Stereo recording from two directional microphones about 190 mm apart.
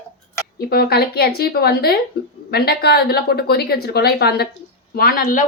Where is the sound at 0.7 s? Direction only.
55° left (ahead or behind).